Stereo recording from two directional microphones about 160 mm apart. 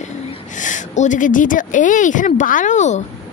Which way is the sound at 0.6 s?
50° left (ahead or behind).